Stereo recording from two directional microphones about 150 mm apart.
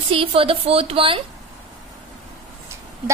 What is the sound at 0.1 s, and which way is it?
Speech, 40° right (ahead or behind).